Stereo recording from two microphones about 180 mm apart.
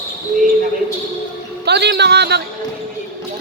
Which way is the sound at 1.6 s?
70° right (ahead or behind).